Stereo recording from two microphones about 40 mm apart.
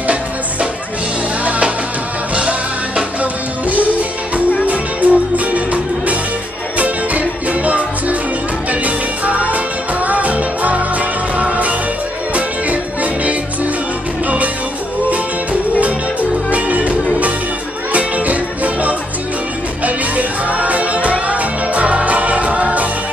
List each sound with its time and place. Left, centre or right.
0.0 s music: right
3.2 s music: right
15.8 s music: right